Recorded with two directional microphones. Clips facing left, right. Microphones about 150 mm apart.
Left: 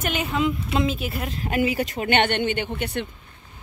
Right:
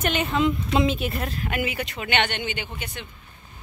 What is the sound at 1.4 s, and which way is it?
Speech, 35° left (ahead or behind).